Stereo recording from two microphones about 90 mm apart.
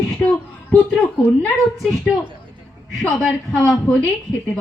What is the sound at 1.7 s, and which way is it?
Speech, centre (ahead or behind).